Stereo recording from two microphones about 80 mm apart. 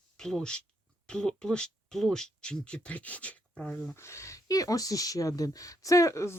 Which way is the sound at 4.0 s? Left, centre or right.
Left.